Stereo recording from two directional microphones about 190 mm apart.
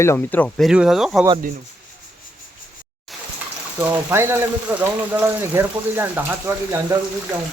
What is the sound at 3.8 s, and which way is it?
Speech, 10° right (ahead or behind).